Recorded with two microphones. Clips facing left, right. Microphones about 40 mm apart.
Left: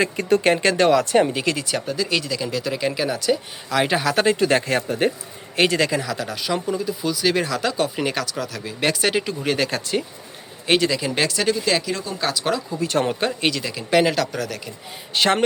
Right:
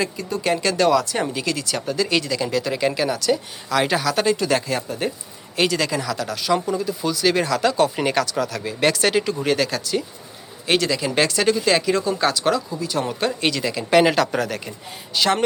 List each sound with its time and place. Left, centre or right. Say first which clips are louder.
0.2 s speech: left 6 dB; left
0.5 s speech: left 1 dB; left
1.5 s speech: left 1 dB; centre
1.9 s speech: right 4 dB; centre
4.0 s speech: left 2 dB; left
5.5 s speech: left 2 dB; left
5.8 s speech: left 1 dB; centre
9.6 s speech: even; left
10.7 s speech: left 1 dB; centre
12.8 s speech: left 3 dB; left
13.4 s speech: right 1 dB; centre
14.0 s speech: right 3 dB; centre
15.1 s speech: left 1 dB; left